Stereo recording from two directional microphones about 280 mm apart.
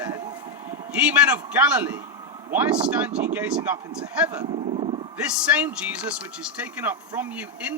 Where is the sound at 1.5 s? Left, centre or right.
Centre.